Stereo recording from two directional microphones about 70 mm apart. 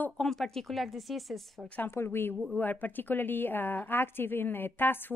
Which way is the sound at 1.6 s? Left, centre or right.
Left.